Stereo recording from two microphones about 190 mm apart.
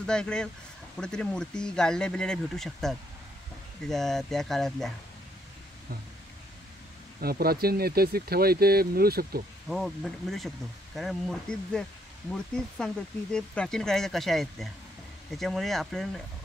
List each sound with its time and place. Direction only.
0.0 s speech: 5° left (ahead or behind)
7.2 s speech: 55° right (ahead or behind)
9.7 s speech: centre (ahead or behind)